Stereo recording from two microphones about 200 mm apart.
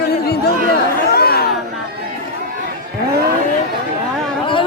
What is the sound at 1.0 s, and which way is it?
Chatter, 50° left (ahead or behind).